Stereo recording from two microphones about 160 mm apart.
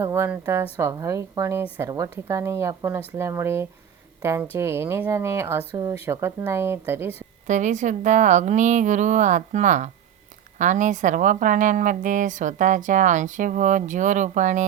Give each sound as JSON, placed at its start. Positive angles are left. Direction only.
{"t": 0.0, "sound": "a woman's voice", "side_deg": -15}
{"t": 7.4, "sound": "speech", "side_deg": -50}